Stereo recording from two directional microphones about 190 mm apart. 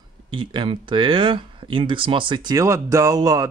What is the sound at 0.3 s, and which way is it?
Speech, 25° right (ahead or behind).